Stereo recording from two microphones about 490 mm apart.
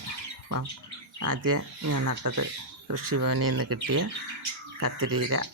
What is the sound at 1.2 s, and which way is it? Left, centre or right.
Speech, right.